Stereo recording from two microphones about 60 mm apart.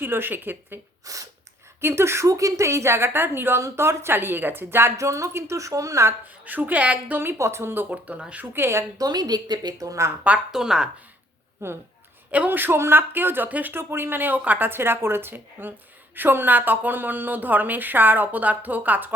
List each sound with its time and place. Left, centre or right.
0.0 s speech: right
1.0 s speech: right
1.8 s a woman's voice: right
4.9 s a woman's voice: right
6.2 s a woman's voice: right
7.3 s speech: right
8.5 s a woman's voice: right
9.0 s a woman's voice: right
9.7 s speech: right
10.5 s speech: centre
11.6 s a woman's voice: right
12.3 s speech: right
14.7 s speech: right